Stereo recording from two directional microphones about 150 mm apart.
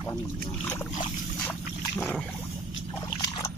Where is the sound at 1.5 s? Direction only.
5° left (ahead or behind).